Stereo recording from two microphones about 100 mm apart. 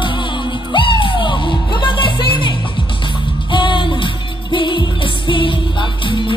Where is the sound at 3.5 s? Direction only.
55° left (ahead or behind).